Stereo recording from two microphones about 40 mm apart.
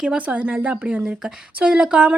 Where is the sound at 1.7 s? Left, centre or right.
Right.